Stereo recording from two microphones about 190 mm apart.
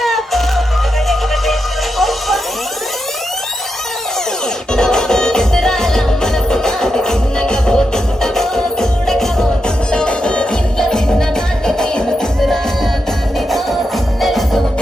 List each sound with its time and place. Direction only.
0.0 s music: centre (ahead or behind)
2.0 s a sound: centre (ahead or behind)
4.7 s music: 5° left (ahead or behind)
14.2 s music: centre (ahead or behind)